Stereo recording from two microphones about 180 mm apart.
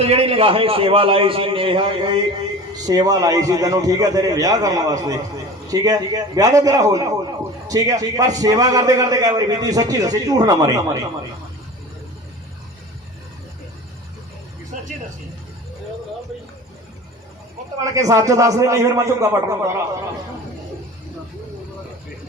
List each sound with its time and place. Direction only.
0.0 s a man's voice: 35° right (ahead or behind)
17.8 s a man's voice: 20° right (ahead or behind)